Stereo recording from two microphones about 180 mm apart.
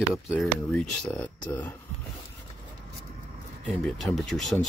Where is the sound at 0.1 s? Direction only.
Centre (ahead or behind).